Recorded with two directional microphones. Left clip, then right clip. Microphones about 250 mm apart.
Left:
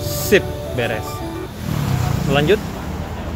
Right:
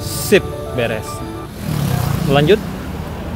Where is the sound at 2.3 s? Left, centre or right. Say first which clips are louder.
Right 3 dB; centre.